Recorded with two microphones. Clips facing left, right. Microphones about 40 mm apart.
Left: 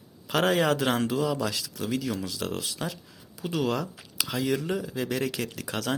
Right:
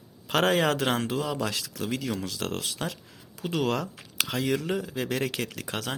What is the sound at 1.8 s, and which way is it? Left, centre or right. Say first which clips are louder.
Speech: left 1 dB; right.